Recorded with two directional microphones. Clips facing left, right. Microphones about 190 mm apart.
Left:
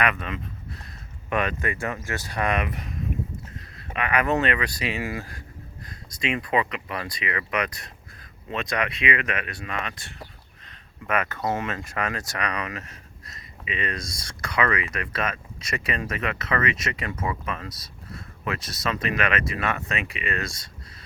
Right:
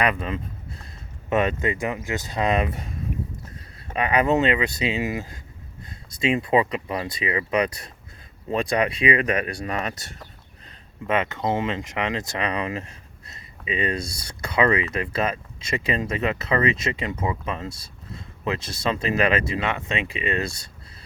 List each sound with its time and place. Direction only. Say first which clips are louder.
0.0 s speech: right 3 dB; 30° right (ahead or behind)
3.9 s speech: right 3 dB; 30° right (ahead or behind)
11.0 s speech: right 3 dB; 25° right (ahead or behind)
14.5 s speech: right 4 dB; 30° right (ahead or behind)